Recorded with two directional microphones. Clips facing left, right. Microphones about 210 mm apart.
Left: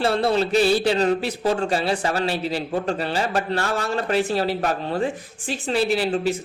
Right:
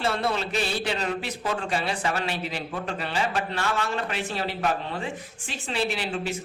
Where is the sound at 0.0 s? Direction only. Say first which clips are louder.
Left 7 dB; 30° left (ahead or behind).